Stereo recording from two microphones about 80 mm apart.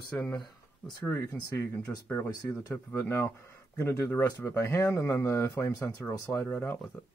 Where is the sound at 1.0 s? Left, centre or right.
Left.